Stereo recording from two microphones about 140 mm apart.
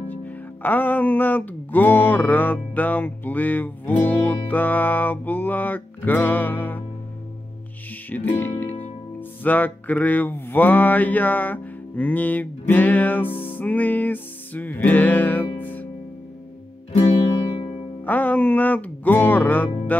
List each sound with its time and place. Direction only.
0.1 s music: 10° left (ahead or behind)
8.1 s music: 15° left (ahead or behind)
17.0 s music: 45° left (ahead or behind)
18.0 s music: 10° left (ahead or behind)